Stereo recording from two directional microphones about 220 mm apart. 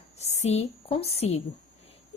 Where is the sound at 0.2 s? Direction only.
30° left (ahead or behind).